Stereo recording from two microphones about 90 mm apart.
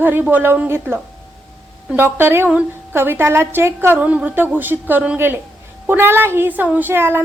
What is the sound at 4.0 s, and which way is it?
Speech, 15° right (ahead or behind).